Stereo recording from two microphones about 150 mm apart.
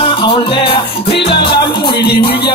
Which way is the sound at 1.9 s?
90° left.